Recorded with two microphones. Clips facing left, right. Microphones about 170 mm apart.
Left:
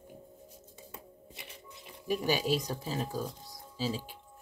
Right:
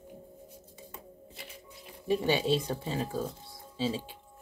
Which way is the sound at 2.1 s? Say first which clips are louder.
Right 3 dB; 25° right (ahead or behind).